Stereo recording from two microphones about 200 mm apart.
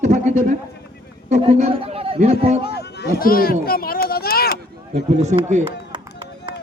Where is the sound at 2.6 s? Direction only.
55° left (ahead or behind).